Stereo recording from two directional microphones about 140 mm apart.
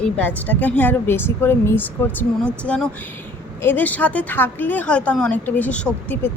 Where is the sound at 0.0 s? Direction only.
10° left (ahead or behind).